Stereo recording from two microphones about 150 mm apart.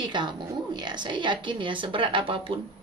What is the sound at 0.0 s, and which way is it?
A woman's voice, 30° right (ahead or behind).